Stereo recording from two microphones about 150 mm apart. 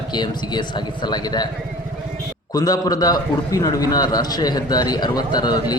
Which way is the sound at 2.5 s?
25° left (ahead or behind).